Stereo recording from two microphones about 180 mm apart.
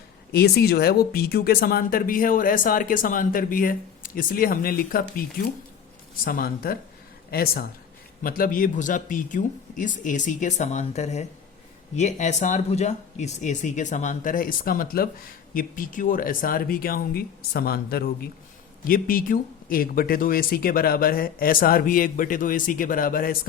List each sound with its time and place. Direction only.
0.3 s speech: 60° left (ahead or behind)